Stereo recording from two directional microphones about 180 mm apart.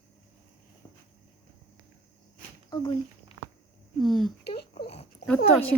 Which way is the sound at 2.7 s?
25° left (ahead or behind).